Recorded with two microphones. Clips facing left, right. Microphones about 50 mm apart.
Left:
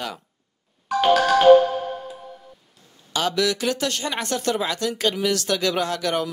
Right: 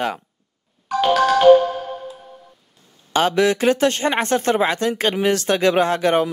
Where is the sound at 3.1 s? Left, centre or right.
Right.